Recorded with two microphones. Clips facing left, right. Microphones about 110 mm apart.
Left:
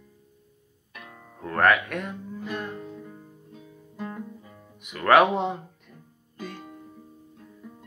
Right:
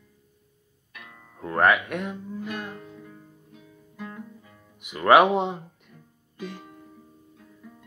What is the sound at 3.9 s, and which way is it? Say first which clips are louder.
Guitar: left 3 dB; 25° left (ahead or behind).